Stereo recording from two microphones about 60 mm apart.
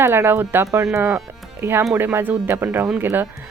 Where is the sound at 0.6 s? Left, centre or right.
Right.